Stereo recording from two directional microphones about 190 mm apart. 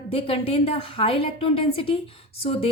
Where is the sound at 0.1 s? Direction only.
30° left (ahead or behind).